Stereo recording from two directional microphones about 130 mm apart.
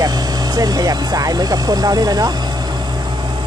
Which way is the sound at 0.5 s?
30° right (ahead or behind).